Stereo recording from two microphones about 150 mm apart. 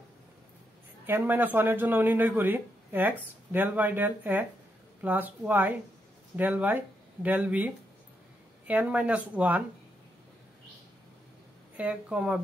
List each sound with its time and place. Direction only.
1.0 s speech: 15° right (ahead or behind)
11.7 s speech: 10° right (ahead or behind)